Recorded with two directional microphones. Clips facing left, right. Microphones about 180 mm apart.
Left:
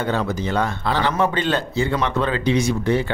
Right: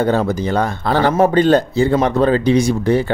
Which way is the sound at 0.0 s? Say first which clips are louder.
Right 6 dB; 40° right (ahead or behind).